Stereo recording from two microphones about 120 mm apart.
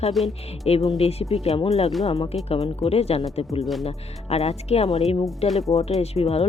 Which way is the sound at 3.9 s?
60° left (ahead or behind).